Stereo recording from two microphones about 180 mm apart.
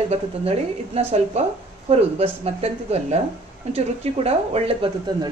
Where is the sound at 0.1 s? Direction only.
35° right (ahead or behind).